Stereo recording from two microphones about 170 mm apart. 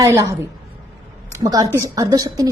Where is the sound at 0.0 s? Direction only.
20° right (ahead or behind).